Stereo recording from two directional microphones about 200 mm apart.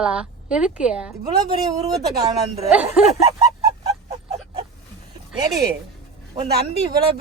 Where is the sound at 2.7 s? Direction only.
5° right (ahead or behind).